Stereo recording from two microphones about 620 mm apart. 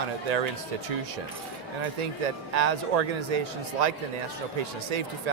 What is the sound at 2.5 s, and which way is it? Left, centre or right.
Speech, right.